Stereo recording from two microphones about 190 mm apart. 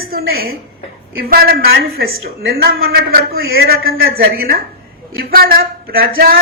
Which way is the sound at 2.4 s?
55° right (ahead or behind).